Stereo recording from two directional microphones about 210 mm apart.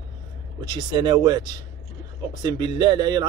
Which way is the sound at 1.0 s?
20° right (ahead or behind).